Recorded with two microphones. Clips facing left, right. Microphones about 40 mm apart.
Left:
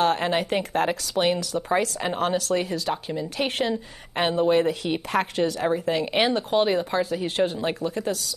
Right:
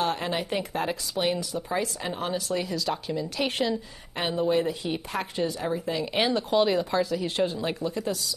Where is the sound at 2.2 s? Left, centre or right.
Left.